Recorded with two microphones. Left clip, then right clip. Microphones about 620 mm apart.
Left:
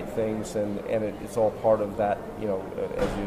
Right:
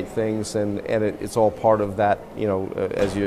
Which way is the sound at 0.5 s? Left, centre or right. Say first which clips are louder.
Right 5 dB; right.